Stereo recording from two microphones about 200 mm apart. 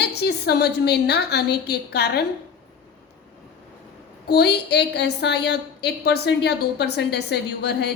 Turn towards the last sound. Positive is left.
turn(degrees=55)  # may be behind; listen again after turning